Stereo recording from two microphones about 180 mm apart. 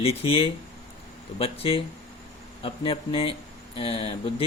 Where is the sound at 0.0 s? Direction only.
30° left (ahead or behind).